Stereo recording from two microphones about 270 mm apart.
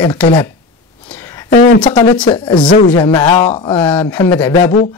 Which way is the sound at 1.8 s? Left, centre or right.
Centre.